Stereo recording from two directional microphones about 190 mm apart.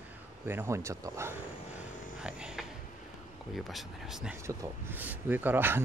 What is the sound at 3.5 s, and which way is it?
Speech, centre (ahead or behind).